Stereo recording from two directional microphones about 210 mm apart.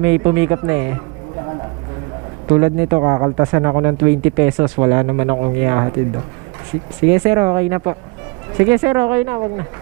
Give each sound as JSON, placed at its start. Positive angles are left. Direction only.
{"t": 0.0, "sound": "a woman's voice", "side_deg": -10}
{"t": 2.5, "sound": "speech", "side_deg": -20}
{"t": 7.1, "sound": "a woman's voice", "side_deg": -15}